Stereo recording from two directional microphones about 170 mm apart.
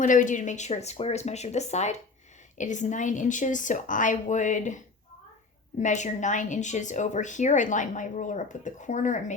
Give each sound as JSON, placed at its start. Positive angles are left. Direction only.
{"t": 0.0, "sound": "speech", "side_deg": 50}
{"t": 5.8, "sound": "speech", "side_deg": 45}